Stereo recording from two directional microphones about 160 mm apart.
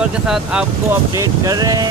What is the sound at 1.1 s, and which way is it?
Speech, 20° right (ahead or behind).